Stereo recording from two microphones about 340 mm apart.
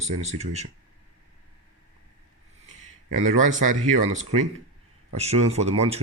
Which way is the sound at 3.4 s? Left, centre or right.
Right.